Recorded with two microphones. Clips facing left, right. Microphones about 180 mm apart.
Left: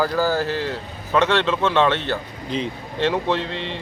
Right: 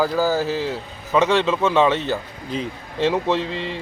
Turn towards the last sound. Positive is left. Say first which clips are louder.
# right 1 dB
turn(degrees=-5)  # may be behind; listen again after turning